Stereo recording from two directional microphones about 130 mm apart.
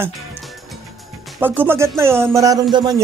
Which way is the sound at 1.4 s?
15° right (ahead or behind).